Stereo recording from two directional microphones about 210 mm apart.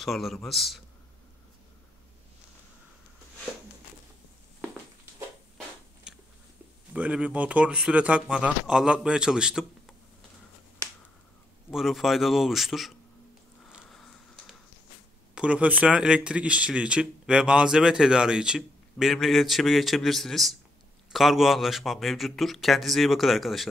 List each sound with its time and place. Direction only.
0.0 s speech: centre (ahead or behind)
6.1 s biting: 5° right (ahead or behind)
6.9 s speech: 5° right (ahead or behind)
11.7 s speech: centre (ahead or behind)
13.7 s a sound: centre (ahead or behind)
15.3 s speech: 5° right (ahead or behind)